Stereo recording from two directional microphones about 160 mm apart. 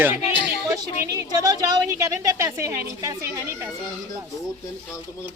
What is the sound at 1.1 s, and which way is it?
A woman's voice, 20° right (ahead or behind).